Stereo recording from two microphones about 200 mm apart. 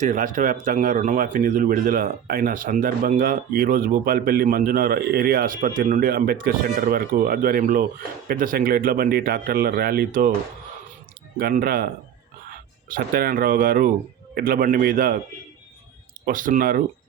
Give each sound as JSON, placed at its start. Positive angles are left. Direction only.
{"t": 0.0, "sound": "speech", "side_deg": -40}
{"t": 11.3, "sound": "speech", "side_deg": -50}
{"t": 12.9, "sound": "speech", "side_deg": -45}
{"t": 16.2, "sound": "speech", "side_deg": -45}